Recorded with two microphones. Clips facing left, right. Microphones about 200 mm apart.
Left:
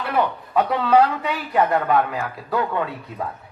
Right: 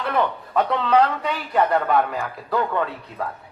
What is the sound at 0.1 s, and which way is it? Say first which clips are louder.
Speech: left 1 dB; 5° left (ahead or behind).